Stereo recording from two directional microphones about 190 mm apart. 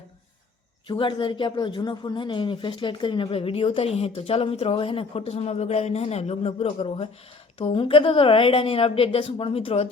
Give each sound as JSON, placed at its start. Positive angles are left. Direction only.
{"t": 0.9, "sound": "speech", "side_deg": 25}